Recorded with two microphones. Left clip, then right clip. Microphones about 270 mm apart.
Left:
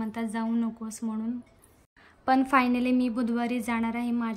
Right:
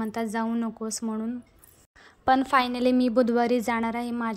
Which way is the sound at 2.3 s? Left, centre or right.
Right.